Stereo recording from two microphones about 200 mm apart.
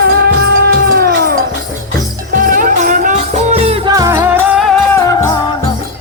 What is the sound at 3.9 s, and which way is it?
Music, 15° right (ahead or behind).